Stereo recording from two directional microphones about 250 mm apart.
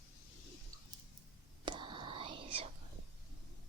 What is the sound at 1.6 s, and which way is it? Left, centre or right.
Whispering, centre.